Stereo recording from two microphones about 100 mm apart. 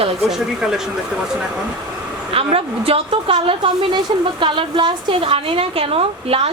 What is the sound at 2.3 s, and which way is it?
A woman's voice, 75° right (ahead or behind).